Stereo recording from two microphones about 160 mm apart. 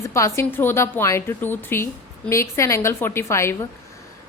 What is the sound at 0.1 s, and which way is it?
A woman's voice, 20° left (ahead or behind).